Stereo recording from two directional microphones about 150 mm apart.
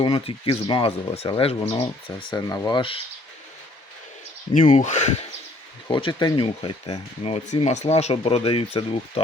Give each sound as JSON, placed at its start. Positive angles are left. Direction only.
{"t": 0.0, "sound": "speech", "side_deg": 35}
{"t": 4.5, "sound": "speech", "side_deg": 55}
{"t": 5.9, "sound": "speech", "side_deg": 30}